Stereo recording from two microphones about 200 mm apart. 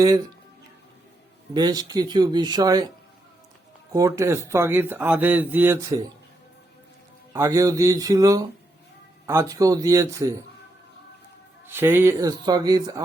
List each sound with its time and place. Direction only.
0.0 s speech: 20° right (ahead or behind)
1.5 s speech: 20° right (ahead or behind)
3.9 s speech: 15° right (ahead or behind)
7.3 s speech: 15° right (ahead or behind)
11.6 s speech: 10° right (ahead or behind)